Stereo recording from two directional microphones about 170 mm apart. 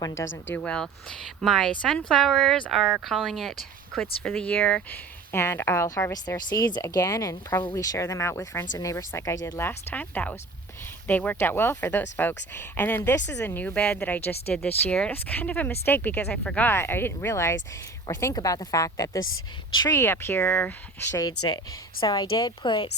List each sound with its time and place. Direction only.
0.2 s speech: 15° left (ahead or behind)
0.5 s speech: 5° left (ahead or behind)
7.6 s a woman's voice: 30° left (ahead or behind)
7.9 s a woman's voice: 15° left (ahead or behind)